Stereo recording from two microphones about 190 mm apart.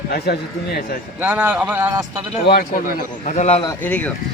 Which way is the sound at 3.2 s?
35° left (ahead or behind).